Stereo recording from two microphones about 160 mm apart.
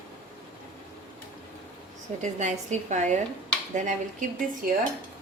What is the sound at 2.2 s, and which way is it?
A woman's voice, 45° right (ahead or behind).